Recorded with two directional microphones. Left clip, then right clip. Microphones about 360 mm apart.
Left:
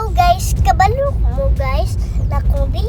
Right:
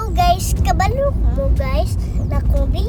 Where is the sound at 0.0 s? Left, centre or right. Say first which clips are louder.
Left 3 dB; centre.